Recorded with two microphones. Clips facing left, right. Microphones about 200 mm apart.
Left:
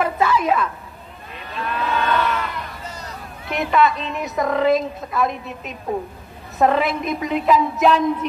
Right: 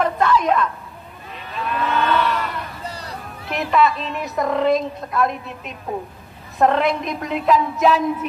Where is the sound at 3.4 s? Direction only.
Centre (ahead or behind).